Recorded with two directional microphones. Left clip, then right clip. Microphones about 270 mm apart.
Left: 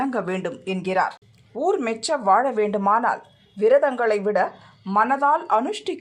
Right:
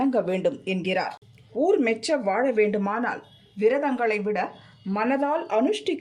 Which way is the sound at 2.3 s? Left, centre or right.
Left.